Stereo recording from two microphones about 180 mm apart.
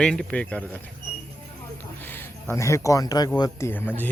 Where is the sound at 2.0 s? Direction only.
10° left (ahead or behind).